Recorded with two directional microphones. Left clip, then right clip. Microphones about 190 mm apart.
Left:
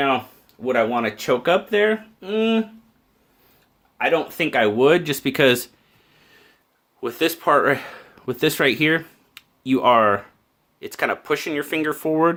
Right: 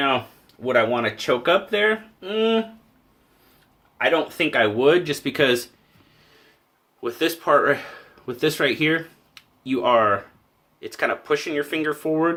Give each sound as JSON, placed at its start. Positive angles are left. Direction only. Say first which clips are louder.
{"t": 0.6, "sound": "speech", "louder": "even", "side_deg": 40}
{"t": 3.9, "sound": "speech", "louder": "even", "side_deg": 40}
{"t": 7.0, "sound": "speech", "louder": "left 2 dB", "side_deg": 55}